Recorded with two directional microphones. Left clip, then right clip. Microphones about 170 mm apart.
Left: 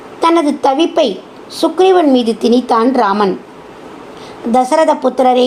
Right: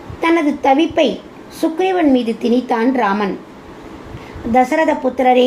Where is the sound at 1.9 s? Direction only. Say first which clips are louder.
Left 4 dB; 25° left (ahead or behind).